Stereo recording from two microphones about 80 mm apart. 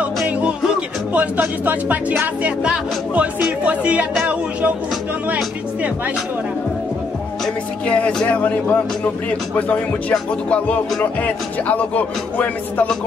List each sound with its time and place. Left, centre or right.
1.1 s speech: centre
7.8 s speech: centre
9.6 s music: centre